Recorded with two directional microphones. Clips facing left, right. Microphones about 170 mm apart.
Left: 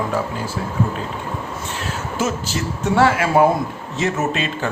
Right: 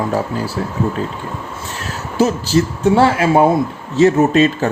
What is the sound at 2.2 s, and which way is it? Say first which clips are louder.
Speech: right 9 dB; 35° right (ahead or behind).